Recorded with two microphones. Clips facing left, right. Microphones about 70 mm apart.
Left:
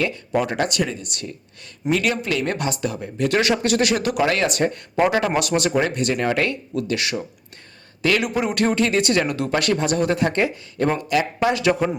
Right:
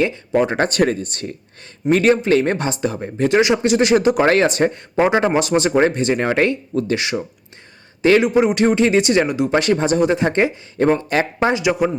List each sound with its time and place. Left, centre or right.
0.3 s speech: right
0.8 s speech: right
1.0 s speech: right
3.2 s speech: right
11.6 s speech: centre